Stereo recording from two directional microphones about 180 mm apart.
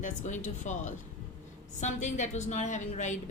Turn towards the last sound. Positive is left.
turn(degrees=40)  # may be behind; listen again after turning